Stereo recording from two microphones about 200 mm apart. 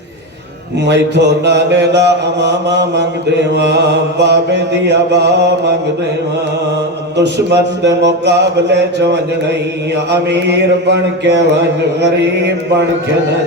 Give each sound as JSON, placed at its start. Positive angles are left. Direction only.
{"t": 0.9, "sound": "mantra", "side_deg": -60}
{"t": 7.2, "sound": "mantra", "side_deg": -60}
{"t": 10.1, "sound": "mantra", "side_deg": -60}